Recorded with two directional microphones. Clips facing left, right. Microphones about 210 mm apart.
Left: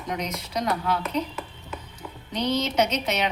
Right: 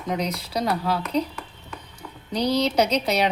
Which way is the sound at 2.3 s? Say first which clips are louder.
Right 3 dB; 35° right (ahead or behind).